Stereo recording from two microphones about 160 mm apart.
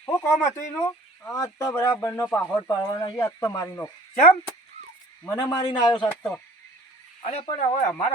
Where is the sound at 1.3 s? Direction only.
20° left (ahead or behind).